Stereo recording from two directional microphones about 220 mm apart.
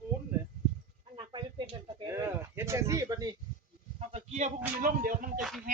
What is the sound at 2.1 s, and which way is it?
Speech, 10° right (ahead or behind).